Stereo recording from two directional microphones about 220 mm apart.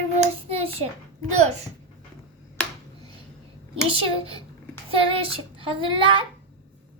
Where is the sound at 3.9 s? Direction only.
25° right (ahead or behind).